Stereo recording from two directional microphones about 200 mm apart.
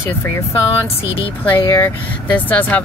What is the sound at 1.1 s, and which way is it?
Speech, 25° left (ahead or behind).